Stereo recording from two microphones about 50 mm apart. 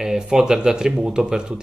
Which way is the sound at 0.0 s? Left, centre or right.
Centre.